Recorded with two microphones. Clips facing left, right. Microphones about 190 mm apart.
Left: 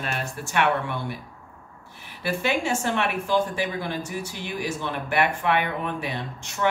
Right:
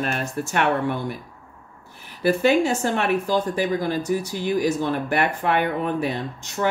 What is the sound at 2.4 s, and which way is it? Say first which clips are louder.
A woman's voice: right 5 dB; 40° right (ahead or behind).